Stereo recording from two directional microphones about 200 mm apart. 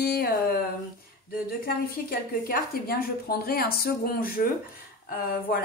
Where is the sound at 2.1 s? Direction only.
50° left (ahead or behind).